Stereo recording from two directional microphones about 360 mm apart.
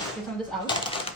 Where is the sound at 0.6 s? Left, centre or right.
Centre.